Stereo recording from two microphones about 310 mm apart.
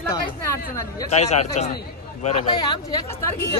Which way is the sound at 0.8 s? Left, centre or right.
Centre.